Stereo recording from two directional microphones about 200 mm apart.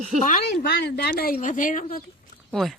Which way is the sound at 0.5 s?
55° left (ahead or behind).